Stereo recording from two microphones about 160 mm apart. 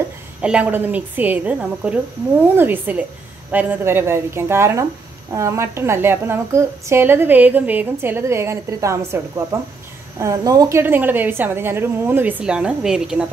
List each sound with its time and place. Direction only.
0.4 s a woman's voice: 10° right (ahead or behind)